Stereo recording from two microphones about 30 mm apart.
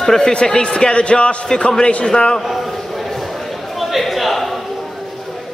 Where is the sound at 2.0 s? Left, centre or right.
Left.